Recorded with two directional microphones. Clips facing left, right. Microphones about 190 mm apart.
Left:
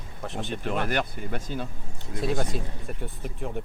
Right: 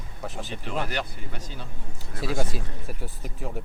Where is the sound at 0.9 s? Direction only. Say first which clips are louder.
Left 4 dB; 50° left (ahead or behind).